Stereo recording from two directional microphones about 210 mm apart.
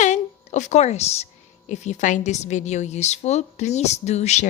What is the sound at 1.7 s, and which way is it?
A woman's voice, 35° left (ahead or behind).